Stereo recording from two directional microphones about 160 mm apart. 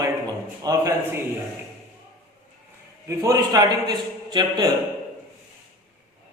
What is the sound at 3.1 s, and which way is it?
A man's voice, 20° right (ahead or behind).